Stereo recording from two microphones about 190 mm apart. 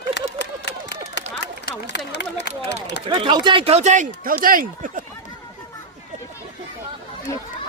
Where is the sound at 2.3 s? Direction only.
65° left (ahead or behind).